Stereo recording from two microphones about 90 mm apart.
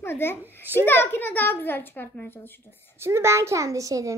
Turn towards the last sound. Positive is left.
turn(degrees=-40)  # may be behind; listen again after turning